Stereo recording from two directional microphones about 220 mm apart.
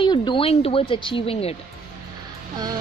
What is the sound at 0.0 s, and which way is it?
Speech, 20° left (ahead or behind).